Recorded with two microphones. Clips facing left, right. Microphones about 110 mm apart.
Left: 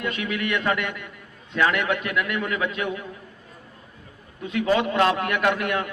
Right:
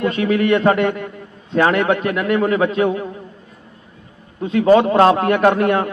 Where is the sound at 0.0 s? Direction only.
35° right (ahead or behind).